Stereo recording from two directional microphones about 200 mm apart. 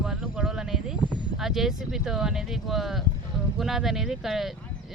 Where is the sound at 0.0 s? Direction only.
Centre (ahead or behind).